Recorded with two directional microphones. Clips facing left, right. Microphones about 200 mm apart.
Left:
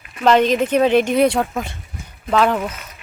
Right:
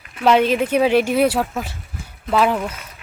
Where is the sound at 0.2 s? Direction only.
10° right (ahead or behind).